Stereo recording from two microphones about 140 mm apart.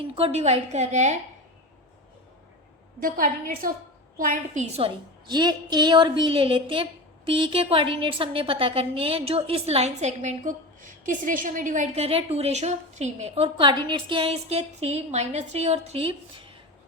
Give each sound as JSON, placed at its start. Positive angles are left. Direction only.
{"t": 0.1, "sound": "a woman's voice", "side_deg": -45}
{"t": 3.0, "sound": "a woman's voice", "side_deg": -80}
{"t": 4.2, "sound": "a woman's voice", "side_deg": -65}
{"t": 5.2, "sound": "a woman's voice", "side_deg": -30}